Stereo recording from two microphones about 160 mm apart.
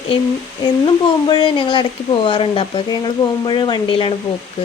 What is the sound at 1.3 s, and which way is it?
Speech, 30° left (ahead or behind).